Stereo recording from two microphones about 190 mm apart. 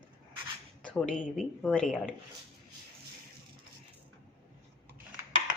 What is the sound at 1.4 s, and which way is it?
Speech, 5° left (ahead or behind).